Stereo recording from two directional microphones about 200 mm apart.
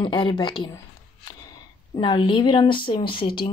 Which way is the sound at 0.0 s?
25° left (ahead or behind).